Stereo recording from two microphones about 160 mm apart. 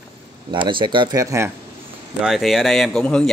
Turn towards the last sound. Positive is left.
turn(degrees=5)  # may be behind; listen again after turning